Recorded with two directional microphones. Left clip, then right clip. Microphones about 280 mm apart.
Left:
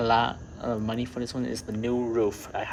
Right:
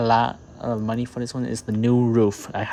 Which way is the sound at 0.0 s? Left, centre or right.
Centre.